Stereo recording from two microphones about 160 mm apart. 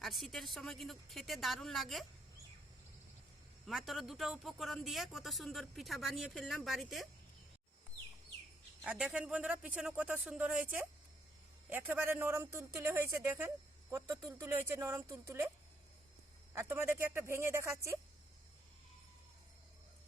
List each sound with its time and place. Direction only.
0.0 s speech: centre (ahead or behind)
3.7 s speech: centre (ahead or behind)
8.8 s speech: 5° right (ahead or behind)
16.5 s speech: 15° right (ahead or behind)